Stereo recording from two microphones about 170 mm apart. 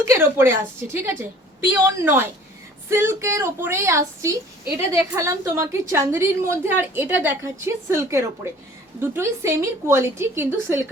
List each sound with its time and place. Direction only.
0.0 s a woman's voice: 15° right (ahead or behind)